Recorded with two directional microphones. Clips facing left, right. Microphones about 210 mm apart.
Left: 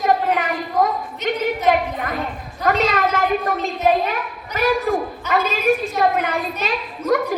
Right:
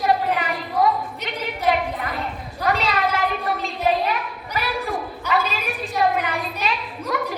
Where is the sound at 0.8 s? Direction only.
45° left (ahead or behind).